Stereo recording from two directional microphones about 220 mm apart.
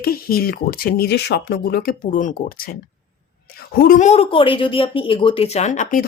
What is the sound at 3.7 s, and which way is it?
A woman's voice, 40° left (ahead or behind).